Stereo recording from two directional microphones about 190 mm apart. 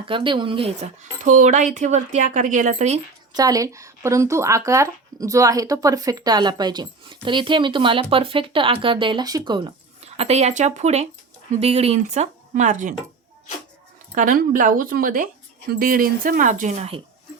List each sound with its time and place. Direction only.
0.1 s speech: 25° right (ahead or behind)
1.2 s a woman's voice: 40° right (ahead or behind)
3.3 s a woman's voice: 20° right (ahead or behind); by 12.9 s 40° right (ahead or behind)
14.2 s speech: 45° right (ahead or behind)